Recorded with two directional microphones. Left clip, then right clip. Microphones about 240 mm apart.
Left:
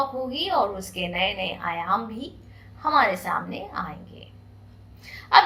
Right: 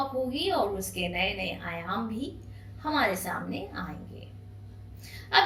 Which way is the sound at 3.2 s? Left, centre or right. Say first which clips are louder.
Left 6 dB; centre.